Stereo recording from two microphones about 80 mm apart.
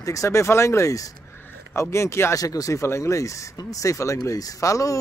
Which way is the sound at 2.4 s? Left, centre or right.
Left.